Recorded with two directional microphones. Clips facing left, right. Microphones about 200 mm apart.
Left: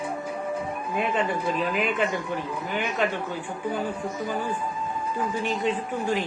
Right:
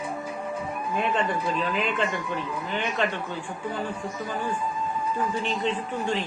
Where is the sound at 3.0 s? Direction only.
5° left (ahead or behind).